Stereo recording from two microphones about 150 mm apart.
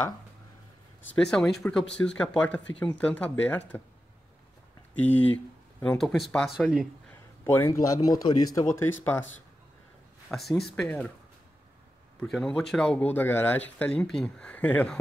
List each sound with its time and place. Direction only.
1.1 s speech: 5° left (ahead or behind)
5.0 s speech: 10° left (ahead or behind)
7.4 s speech: 20° left (ahead or behind)
10.6 s speech: 5° left (ahead or behind)
12.2 s speech: 5° left (ahead or behind)